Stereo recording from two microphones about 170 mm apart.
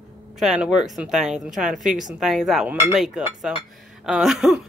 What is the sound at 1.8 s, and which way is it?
Speech, 50° right (ahead or behind).